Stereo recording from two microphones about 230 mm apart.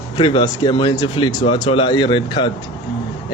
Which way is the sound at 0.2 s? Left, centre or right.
Centre.